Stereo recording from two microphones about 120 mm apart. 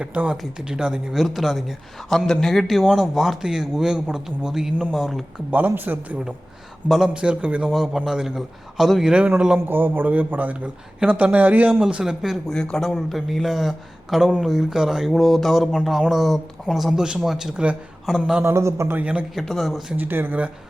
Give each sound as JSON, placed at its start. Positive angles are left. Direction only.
{"t": 0.0, "sound": "a man's voice", "side_deg": -10}
{"t": 5.5, "sound": "a man's voice", "side_deg": -15}
{"t": 9.6, "sound": "a man's voice", "side_deg": -15}
{"t": 18.4, "sound": "a man's voice", "side_deg": -25}
{"t": 19.3, "sound": "a man's voice", "side_deg": 0}
{"t": 20.0, "sound": "a man's voice", "side_deg": -15}